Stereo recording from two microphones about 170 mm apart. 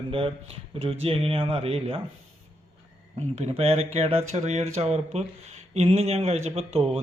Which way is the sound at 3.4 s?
35° right (ahead or behind).